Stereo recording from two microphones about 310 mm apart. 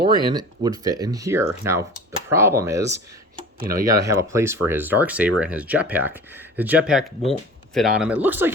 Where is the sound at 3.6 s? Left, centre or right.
Right.